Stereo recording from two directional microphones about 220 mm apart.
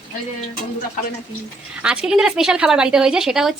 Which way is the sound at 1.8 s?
5° right (ahead or behind).